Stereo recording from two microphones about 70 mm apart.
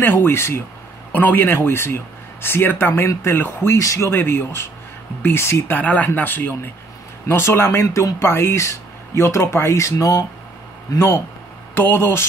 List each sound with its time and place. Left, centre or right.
0.0 s speech: left
3.7 s speech: left
4.1 s speech: left
5.8 s speech: left
11.0 s speech: left